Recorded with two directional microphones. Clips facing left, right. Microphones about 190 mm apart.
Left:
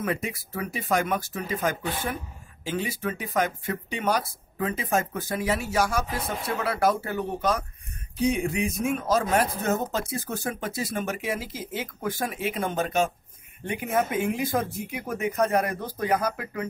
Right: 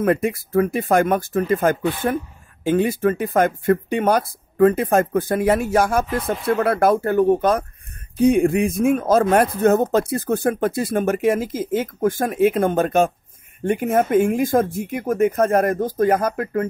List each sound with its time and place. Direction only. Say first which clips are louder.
0.0 s speech: right 10 dB; 55° right (ahead or behind)